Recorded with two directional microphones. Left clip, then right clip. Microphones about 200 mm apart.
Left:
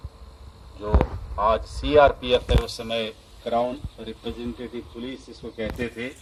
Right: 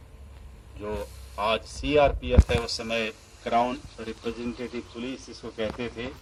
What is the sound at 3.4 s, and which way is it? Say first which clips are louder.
Speech: even; 30° left (ahead or behind).